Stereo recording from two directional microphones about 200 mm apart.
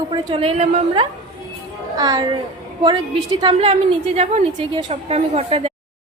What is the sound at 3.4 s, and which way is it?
A woman's voice, 30° right (ahead or behind).